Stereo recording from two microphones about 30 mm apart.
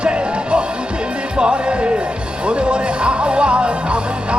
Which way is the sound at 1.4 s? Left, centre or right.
Right.